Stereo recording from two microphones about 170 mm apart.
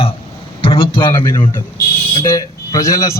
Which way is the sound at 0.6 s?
30° left (ahead or behind).